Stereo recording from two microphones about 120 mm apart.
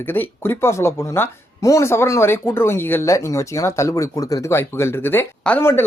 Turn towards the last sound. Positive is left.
turn(degrees=15)  # may be behind; listen again after turning